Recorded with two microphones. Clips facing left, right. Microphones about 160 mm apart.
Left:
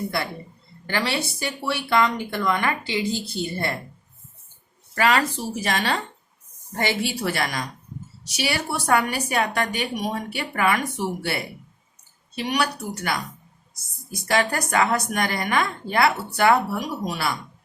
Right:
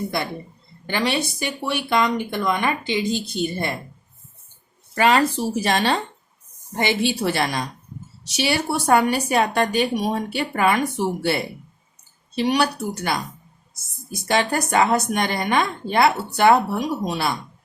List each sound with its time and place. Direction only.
0.9 s speech: 20° right (ahead or behind)
4.9 s speech: 25° right (ahead or behind)